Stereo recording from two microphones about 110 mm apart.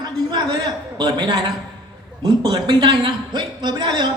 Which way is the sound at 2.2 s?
45° right (ahead or behind).